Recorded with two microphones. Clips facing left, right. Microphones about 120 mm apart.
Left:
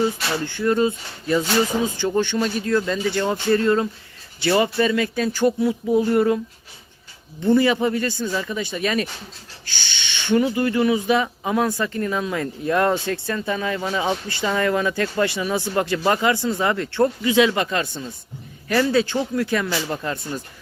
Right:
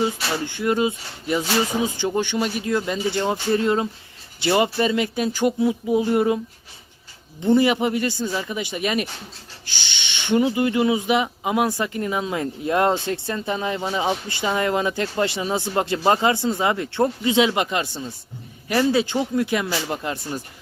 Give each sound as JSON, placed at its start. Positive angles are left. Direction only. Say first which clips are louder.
{"t": 0.4, "sound": "speech", "louder": "left 2 dB", "side_deg": -15}
{"t": 7.4, "sound": "speech", "louder": "even", "side_deg": -20}